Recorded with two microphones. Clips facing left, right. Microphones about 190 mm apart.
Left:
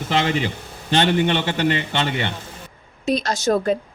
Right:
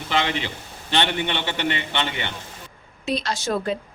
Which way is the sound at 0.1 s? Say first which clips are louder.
Left 3 dB; 45° left (ahead or behind).